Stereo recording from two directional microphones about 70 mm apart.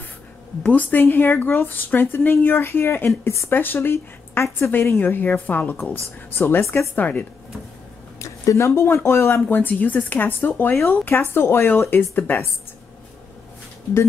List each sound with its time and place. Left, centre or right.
0.7 s a woman's voice: left
8.2 s speech: left
9.6 s a woman's voice: left